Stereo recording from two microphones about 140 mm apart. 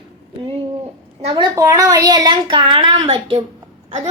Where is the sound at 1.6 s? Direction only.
25° right (ahead or behind).